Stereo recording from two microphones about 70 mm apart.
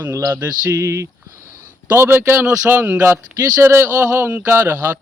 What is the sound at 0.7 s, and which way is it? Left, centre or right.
Speech, right.